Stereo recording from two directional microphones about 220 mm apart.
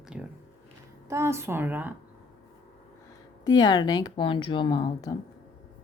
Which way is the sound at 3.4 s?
20° left (ahead or behind).